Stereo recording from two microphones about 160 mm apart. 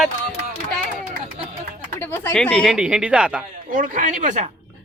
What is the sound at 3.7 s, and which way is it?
Speech, 55° right (ahead or behind).